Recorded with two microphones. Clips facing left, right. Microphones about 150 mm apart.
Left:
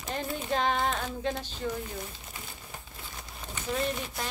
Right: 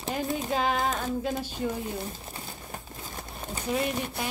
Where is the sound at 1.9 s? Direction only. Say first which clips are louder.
Right 5 dB; 35° right (ahead or behind).